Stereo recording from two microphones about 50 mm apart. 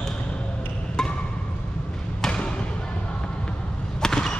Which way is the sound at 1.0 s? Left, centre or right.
Centre.